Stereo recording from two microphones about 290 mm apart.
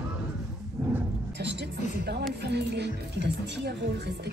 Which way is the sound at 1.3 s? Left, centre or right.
Right.